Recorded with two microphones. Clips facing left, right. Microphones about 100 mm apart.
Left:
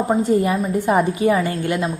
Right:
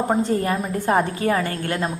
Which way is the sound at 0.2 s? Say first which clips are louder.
Left 4 dB; 15° left (ahead or behind).